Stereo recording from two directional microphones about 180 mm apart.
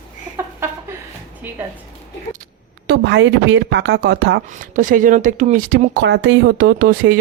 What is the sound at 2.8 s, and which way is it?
Speech, 80° right.